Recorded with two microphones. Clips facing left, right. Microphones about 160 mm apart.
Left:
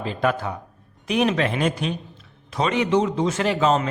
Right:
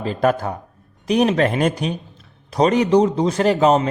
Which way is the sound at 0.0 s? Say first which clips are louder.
Right 4 dB; 40° right (ahead or behind).